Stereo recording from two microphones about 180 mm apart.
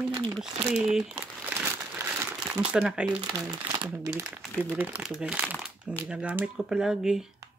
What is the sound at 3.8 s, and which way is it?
Speech, 20° right (ahead or behind).